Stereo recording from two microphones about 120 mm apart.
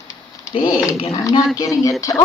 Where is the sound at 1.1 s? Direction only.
30° left (ahead or behind).